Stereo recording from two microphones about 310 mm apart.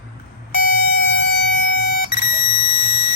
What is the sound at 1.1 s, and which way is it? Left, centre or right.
Air horn, left.